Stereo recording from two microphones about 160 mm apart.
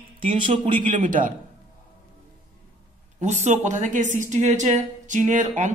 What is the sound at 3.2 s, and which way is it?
A man's voice, 45° right (ahead or behind).